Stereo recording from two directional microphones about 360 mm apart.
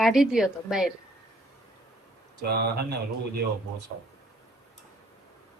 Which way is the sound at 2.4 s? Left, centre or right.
Right.